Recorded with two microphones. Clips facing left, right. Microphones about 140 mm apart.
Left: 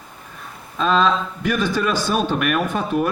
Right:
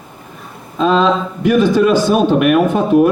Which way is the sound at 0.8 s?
10° right (ahead or behind).